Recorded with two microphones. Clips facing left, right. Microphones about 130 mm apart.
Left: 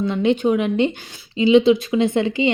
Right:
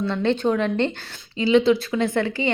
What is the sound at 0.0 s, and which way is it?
A woman's voice, 15° left (ahead or behind).